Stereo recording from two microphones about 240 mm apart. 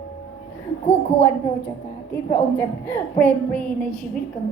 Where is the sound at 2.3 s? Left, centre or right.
Centre.